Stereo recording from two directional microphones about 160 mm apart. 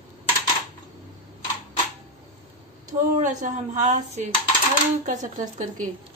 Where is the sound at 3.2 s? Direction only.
50° right (ahead or behind).